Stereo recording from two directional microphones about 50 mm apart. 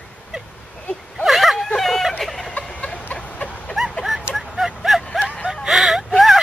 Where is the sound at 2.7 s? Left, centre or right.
Left.